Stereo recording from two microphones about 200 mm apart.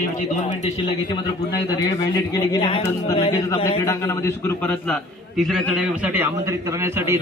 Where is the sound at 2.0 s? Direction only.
20° left (ahead or behind).